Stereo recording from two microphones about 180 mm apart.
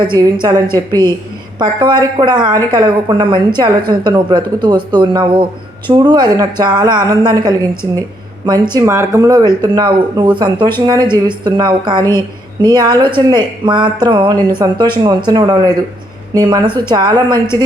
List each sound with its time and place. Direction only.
0.0 s a woman's voice: 25° right (ahead or behind)